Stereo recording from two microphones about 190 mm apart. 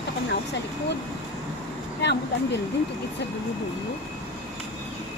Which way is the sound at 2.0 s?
65° left (ahead or behind).